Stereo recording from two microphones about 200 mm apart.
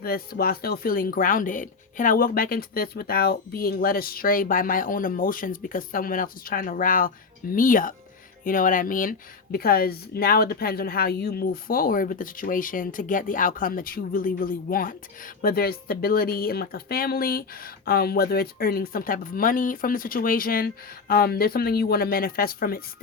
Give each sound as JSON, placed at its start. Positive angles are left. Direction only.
{"t": 0.0, "sound": "speech", "side_deg": 50}